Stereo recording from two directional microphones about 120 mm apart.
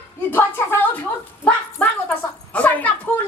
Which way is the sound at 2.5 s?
15° left (ahead or behind).